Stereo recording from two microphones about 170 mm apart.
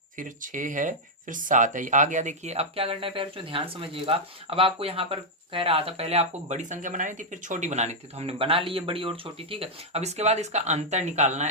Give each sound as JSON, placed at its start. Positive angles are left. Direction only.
{"t": 0.2, "sound": "speech", "side_deg": -50}